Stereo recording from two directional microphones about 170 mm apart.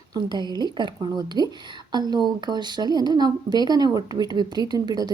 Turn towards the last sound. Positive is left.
turn(degrees=-25)  # may be behind; listen again after turning